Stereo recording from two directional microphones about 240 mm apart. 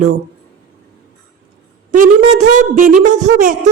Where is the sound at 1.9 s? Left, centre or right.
Right.